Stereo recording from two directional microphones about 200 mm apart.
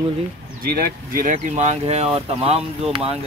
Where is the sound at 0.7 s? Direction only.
45° right (ahead or behind); by 3.2 s 30° right (ahead or behind).